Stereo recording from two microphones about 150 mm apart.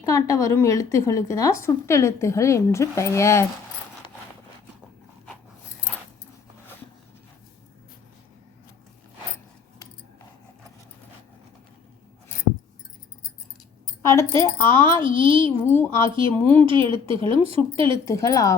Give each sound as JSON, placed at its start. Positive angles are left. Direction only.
{"t": 0.0, "sound": "speech", "side_deg": 20}
{"t": 14.0, "sound": "speech", "side_deg": 20}
{"t": 15.0, "sound": "speech", "side_deg": -35}
{"t": 15.4, "sound": "speech", "side_deg": 15}
{"t": 16.0, "sound": "speech", "side_deg": -35}
{"t": 16.3, "sound": "speech", "side_deg": 10}
{"t": 16.6, "sound": "speech", "side_deg": -35}
{"t": 18.0, "sound": "speech", "side_deg": 20}